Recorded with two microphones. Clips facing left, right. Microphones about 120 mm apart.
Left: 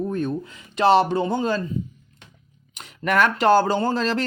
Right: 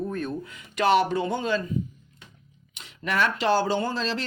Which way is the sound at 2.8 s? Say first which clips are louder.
Left 6 dB; 55° left (ahead or behind).